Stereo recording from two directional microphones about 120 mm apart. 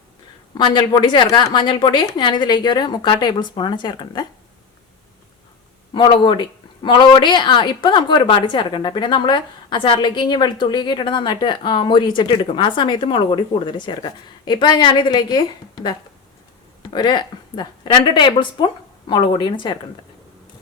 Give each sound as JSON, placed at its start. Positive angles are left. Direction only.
{"t": 0.5, "sound": "a woman's voice", "side_deg": 40}
{"t": 5.9, "sound": "a woman's voice", "side_deg": 45}